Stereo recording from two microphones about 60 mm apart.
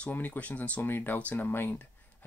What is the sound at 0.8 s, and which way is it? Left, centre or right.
Speech, left.